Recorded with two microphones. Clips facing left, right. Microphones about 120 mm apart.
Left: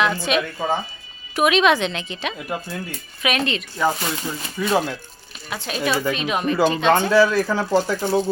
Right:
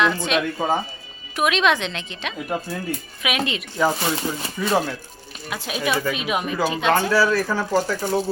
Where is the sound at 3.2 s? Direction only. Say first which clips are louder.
Left 4 dB; 10° right (ahead or behind).